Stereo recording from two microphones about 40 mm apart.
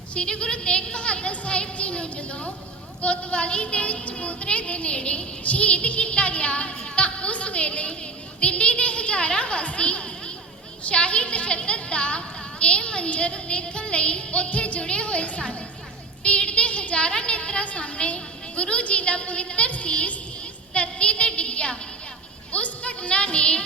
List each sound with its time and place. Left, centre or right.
0.1 s a woman's voice: left
20.7 s child singing: left
22.5 s music: left